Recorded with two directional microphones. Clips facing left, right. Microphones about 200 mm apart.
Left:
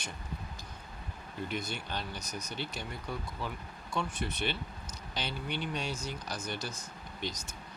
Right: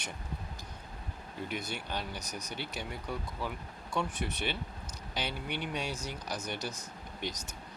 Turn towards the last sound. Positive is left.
turn(degrees=-15)  # may be behind; listen again after turning